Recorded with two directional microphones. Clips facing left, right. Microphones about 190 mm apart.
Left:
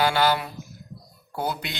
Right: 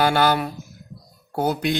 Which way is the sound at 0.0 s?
50° right (ahead or behind).